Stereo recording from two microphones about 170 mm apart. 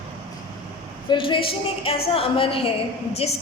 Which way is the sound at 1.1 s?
30° left (ahead or behind).